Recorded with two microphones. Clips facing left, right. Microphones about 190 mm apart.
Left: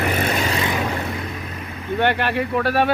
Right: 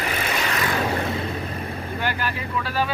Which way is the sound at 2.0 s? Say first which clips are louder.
Left 9 dB; 65° left (ahead or behind).